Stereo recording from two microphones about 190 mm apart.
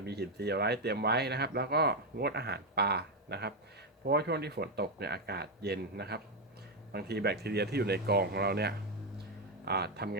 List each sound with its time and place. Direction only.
0.0 s speech: 60° right (ahead or behind)